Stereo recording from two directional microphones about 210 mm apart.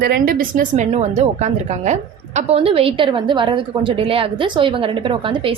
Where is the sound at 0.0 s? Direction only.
45° right (ahead or behind).